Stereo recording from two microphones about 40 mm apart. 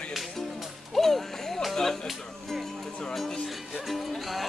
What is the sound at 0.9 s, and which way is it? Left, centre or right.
Speech, centre.